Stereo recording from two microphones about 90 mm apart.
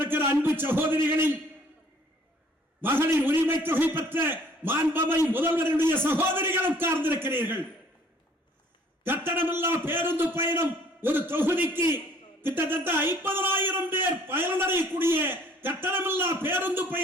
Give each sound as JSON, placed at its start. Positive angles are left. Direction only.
{"t": 0.0, "sound": "a man's voice", "side_deg": -25}
{"t": 2.8, "sound": "a man's voice", "side_deg": -25}
{"t": 9.0, "sound": "a man's voice", "side_deg": -25}